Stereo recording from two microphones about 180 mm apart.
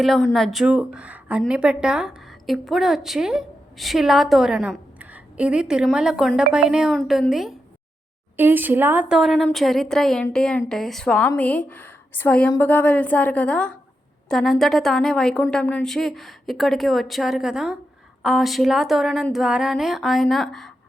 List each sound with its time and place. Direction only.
0.0 s a woman's voice: centre (ahead or behind)